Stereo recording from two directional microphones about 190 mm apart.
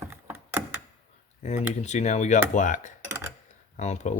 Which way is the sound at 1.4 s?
35° left (ahead or behind).